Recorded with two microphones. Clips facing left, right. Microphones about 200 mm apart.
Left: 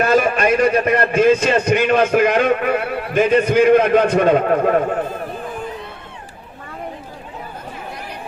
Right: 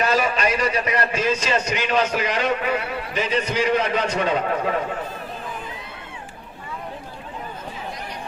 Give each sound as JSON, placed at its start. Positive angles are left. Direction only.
{"t": 0.0, "sound": "a man's voice", "side_deg": 55}